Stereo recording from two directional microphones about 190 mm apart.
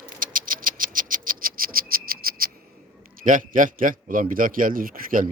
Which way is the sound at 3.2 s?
45° right (ahead or behind).